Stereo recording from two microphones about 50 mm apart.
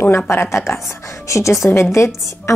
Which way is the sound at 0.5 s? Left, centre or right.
Left.